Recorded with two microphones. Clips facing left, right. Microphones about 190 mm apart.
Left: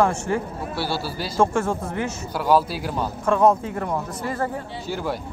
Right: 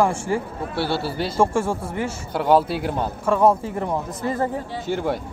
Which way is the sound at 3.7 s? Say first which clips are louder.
Right 1 dB; 20° right (ahead or behind).